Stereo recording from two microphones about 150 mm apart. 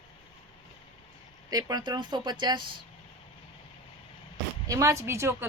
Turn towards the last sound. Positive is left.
turn(degrees=-20)  # may be behind; listen again after turning